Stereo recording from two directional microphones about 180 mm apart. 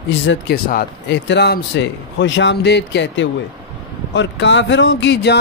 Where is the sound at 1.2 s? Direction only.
70° left (ahead or behind).